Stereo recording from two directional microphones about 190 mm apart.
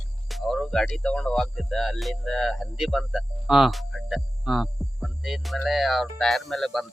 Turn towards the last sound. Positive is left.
turn(degrees=0)  # may be behind; listen again after turning